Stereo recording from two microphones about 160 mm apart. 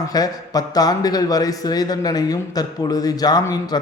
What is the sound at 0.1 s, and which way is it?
A man's voice, 25° left (ahead or behind).